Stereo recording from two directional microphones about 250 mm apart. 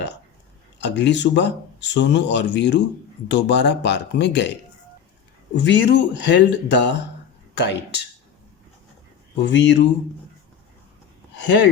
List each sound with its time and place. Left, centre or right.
0.8 s speech: left
5.5 s speech: left
9.4 s speech: left
11.4 s speech: left